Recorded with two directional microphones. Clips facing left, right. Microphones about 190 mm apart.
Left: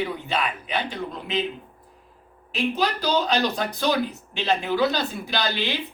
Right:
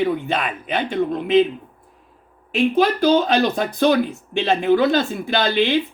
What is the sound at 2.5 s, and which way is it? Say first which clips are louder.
Speech: right 7 dB; 55° right (ahead or behind).